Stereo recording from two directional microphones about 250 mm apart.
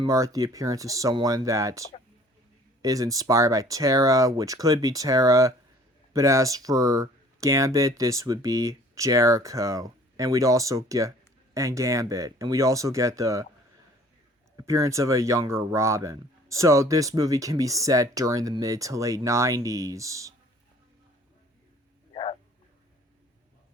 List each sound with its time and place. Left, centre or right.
0.0 s speech: centre
2.8 s speech: centre
14.5 s speech: centre
22.1 s a sound: left